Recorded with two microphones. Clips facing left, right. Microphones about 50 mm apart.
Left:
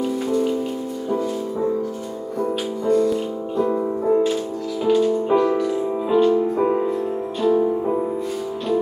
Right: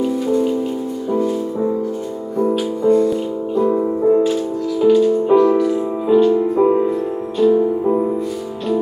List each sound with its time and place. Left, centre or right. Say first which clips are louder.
2.8 s music: right 4 dB; right
3.5 s music: right 4 dB; centre